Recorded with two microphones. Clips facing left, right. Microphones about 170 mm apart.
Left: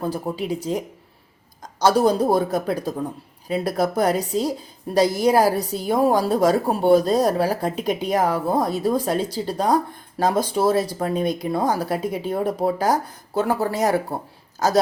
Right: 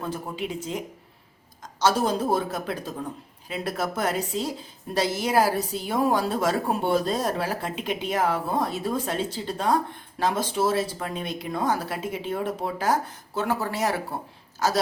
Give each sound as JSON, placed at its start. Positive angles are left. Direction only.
{"t": 0.0, "sound": "a woman's voice", "side_deg": 35}